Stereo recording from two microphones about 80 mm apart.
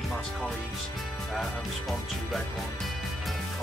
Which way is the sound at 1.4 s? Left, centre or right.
Centre.